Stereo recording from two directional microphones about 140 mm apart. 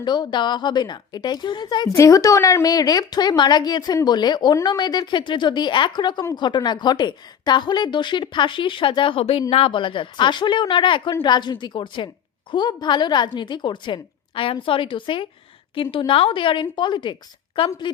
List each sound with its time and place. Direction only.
0.0 s speech: 30° left (ahead or behind)